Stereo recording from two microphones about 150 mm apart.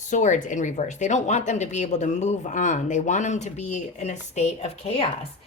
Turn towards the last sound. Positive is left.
turn(degrees=40)  # may be behind; listen again after turning